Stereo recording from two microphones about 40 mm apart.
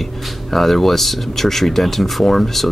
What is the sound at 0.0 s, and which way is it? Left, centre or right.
Speech, centre.